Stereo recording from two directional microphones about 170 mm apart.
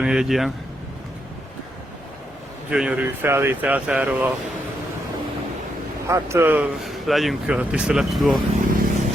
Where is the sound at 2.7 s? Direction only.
5° right (ahead or behind).